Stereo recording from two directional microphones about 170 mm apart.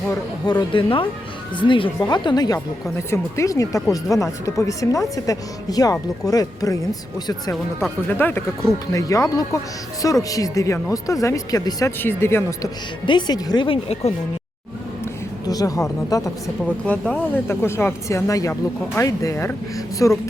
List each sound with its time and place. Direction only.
0.1 s speech: 20° left (ahead or behind)
0.7 s speech: 30° left (ahead or behind)
8.0 s speech: 10° left (ahead or behind)
13.1 s speech: 25° left (ahead or behind)
15.4 s speech: 20° left (ahead or behind)
16.8 s speech: 10° left (ahead or behind)